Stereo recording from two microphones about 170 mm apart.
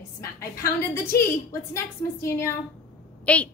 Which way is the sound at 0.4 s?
15° left (ahead or behind).